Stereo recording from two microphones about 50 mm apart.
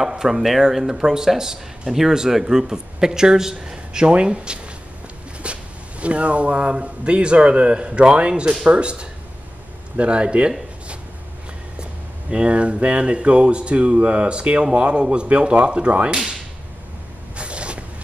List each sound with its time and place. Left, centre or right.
0.0 s speech: centre
12.3 s speech: right
17.4 s a sound: right